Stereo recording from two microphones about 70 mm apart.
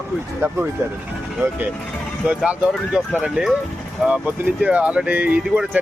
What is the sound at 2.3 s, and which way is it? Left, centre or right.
Speech, centre.